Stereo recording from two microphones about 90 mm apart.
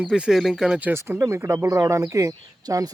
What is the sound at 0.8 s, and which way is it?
Speech, 25° right (ahead or behind).